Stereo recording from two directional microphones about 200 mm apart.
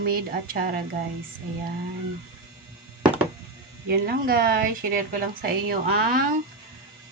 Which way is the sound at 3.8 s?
50° right (ahead or behind).